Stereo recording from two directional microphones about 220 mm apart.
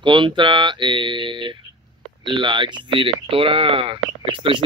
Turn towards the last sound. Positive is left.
turn(degrees=-20)  # may be behind; listen again after turning